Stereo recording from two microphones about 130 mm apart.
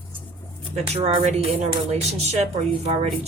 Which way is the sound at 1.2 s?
60° right (ahead or behind).